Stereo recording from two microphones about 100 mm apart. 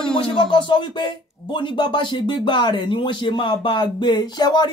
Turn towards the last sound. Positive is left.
turn(degrees=45)  # may be behind; listen again after turning